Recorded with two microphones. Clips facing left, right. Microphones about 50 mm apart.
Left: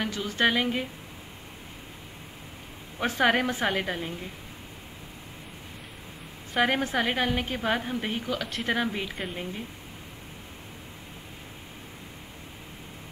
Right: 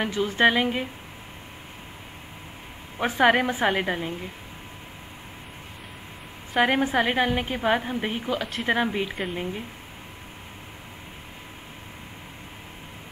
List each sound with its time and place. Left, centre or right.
0.0 s a woman's voice: right
3.0 s a woman's voice: centre
6.5 s a woman's voice: centre